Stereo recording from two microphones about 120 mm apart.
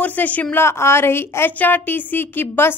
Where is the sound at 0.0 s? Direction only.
15° left (ahead or behind).